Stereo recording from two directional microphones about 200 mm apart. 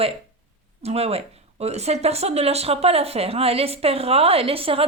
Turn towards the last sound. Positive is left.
turn(degrees=-30)  # may be behind; listen again after turning